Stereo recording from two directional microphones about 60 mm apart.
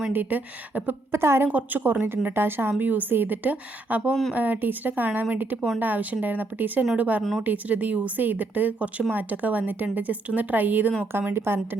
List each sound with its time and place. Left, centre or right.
0.1 s a woman's voice: right
1.1 s a woman's voice: right
1.5 s a woman's voice: right
4.1 s speech: centre
4.4 s a woman's voice: right
7.2 s speech: centre
7.4 s a woman's voice: right